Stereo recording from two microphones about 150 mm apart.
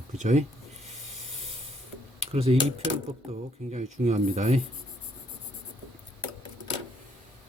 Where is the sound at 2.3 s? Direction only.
40° right (ahead or behind).